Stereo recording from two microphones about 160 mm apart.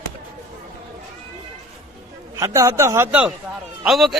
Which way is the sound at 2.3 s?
20° right (ahead or behind).